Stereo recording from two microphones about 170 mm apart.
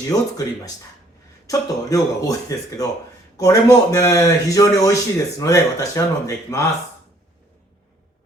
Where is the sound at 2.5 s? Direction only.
20° left (ahead or behind).